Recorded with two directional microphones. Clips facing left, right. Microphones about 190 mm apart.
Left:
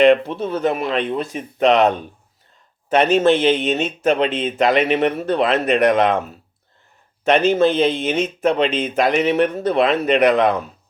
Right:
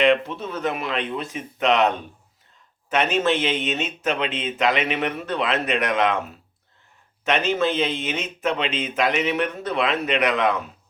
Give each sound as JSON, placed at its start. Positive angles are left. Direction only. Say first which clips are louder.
{"t": 0.0, "sound": "speech", "louder": "left 6 dB", "side_deg": 40}
{"t": 2.9, "sound": "speech", "louder": "left 7 dB", "side_deg": 35}